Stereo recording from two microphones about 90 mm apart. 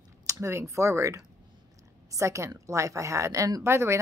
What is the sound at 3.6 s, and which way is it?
Speech, 30° right (ahead or behind).